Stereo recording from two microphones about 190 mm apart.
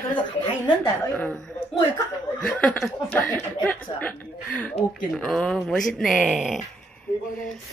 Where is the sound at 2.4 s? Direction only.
5° left (ahead or behind).